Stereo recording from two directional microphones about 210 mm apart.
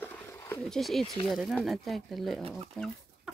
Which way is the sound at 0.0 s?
10° left (ahead or behind).